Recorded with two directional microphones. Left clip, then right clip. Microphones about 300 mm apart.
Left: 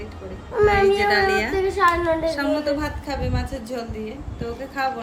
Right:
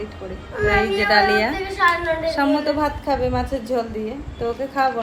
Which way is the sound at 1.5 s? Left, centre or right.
Left.